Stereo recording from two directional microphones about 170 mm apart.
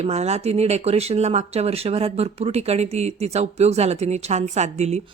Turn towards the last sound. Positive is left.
turn(degrees=-40)  # may be behind; listen again after turning